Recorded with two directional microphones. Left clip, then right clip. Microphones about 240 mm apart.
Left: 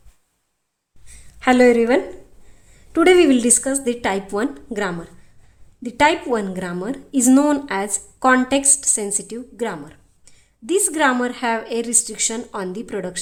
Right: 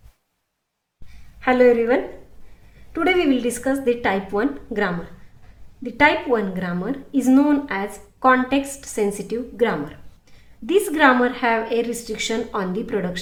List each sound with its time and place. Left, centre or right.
1.4 s a woman's voice: left